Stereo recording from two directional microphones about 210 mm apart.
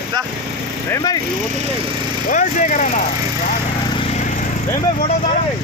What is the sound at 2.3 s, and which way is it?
Speech, 35° left (ahead or behind).